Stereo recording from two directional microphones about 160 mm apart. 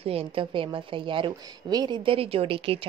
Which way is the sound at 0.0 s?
35° right (ahead or behind).